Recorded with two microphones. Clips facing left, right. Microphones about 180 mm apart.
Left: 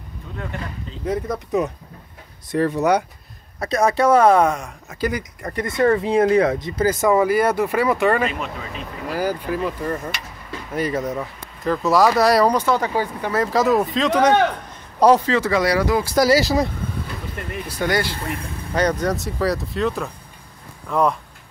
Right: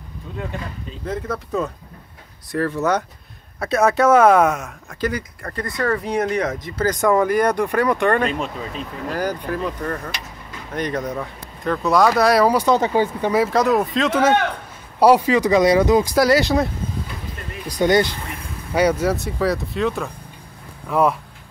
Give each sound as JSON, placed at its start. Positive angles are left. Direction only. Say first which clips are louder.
{"t": 1.0, "sound": "speech", "louder": "left 2 dB", "side_deg": 10}
{"t": 3.5, "sound": "speech", "louder": "right 1 dB", "side_deg": 0}
{"t": 5.0, "sound": "speech", "louder": "even", "side_deg": 15}
{"t": 6.8, "sound": "speech", "louder": "even", "side_deg": 5}
{"t": 12.5, "sound": "speech", "louder": "right 3 dB", "side_deg": -20}
{"t": 13.5, "sound": "speech", "louder": "even", "side_deg": 0}
{"t": 16.2, "sound": "speech", "louder": "even", "side_deg": 0}
{"t": 17.6, "sound": "speech", "louder": "right 6 dB", "side_deg": -20}
{"t": 18.7, "sound": "speech", "louder": "right 2 dB", "side_deg": -10}